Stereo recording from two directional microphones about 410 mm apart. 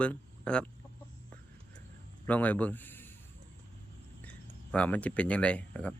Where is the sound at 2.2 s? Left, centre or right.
Centre.